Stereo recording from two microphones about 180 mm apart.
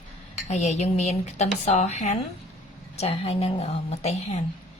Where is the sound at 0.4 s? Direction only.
40° left (ahead or behind).